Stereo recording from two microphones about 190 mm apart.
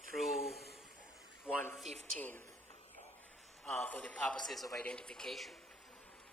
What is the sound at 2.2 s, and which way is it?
Speech, 10° left (ahead or behind).